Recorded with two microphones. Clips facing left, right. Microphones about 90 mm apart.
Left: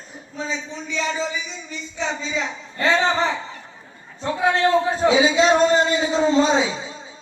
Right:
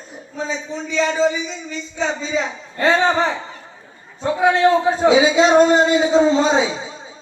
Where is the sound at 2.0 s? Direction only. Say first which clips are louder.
Right 4 dB; 35° right (ahead or behind).